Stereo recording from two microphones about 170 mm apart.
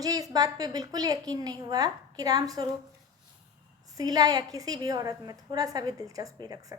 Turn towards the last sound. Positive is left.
turn(degrees=-20)  # may be behind; listen again after turning